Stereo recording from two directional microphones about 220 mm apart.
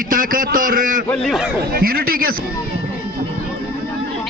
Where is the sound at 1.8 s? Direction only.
40° right (ahead or behind).